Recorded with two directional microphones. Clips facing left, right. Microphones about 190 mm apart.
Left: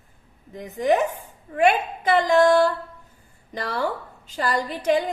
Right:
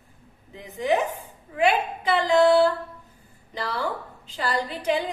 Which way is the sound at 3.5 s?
45° left (ahead or behind).